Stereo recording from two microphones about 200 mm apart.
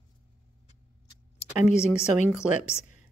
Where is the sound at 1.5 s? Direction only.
35° left (ahead or behind).